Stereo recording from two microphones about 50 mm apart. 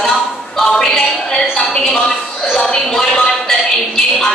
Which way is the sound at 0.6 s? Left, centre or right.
Centre.